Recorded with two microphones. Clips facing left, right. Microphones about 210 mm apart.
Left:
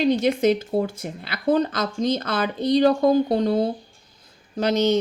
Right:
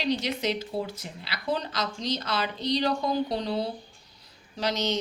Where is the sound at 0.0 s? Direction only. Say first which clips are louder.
Left 9 dB; 50° left (ahead or behind).